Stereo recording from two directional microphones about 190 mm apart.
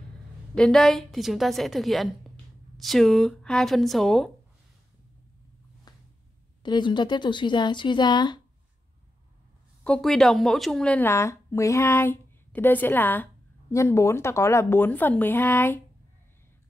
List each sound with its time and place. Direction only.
0.6 s a woman's voice: 5° left (ahead or behind)
5.9 s a sound: 20° left (ahead or behind)
6.6 s speech: 25° left (ahead or behind)
9.8 s a woman's voice: 5° left (ahead or behind)